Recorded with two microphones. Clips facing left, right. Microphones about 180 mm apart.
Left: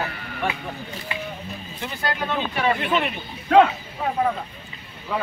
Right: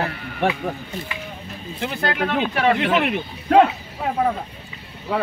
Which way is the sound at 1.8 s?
70° right (ahead or behind).